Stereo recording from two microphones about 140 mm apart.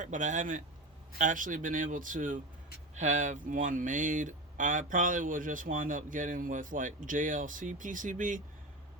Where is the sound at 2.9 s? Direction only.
55° right (ahead or behind).